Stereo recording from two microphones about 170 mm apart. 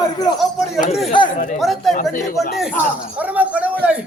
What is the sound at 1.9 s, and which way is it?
Speech, 50° left (ahead or behind).